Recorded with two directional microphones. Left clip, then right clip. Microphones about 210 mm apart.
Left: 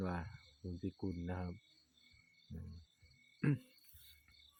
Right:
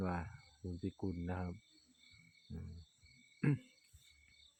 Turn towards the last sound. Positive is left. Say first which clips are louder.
# even
turn(degrees=-15)  # may be behind; listen again after turning